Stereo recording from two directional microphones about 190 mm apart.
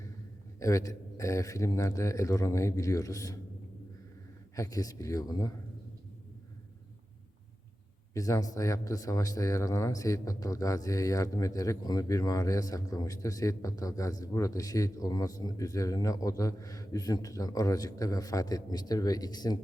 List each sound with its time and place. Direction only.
0.6 s speech: 15° left (ahead or behind)
4.5 s speech: 15° left (ahead or behind)
8.1 s speech: 15° left (ahead or behind)